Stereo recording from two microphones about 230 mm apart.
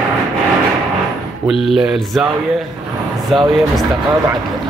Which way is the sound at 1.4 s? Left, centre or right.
Centre.